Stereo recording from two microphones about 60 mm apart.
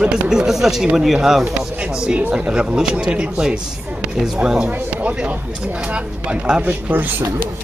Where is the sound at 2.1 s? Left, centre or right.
Right.